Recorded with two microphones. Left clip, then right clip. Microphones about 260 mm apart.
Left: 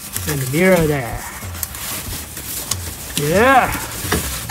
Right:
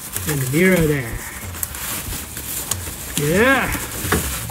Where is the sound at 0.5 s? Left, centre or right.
Left.